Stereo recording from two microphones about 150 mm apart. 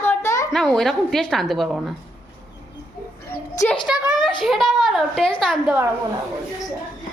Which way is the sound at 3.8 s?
30° left (ahead or behind).